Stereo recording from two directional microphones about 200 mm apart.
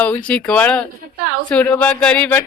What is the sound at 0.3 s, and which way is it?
Speech, 5° left (ahead or behind).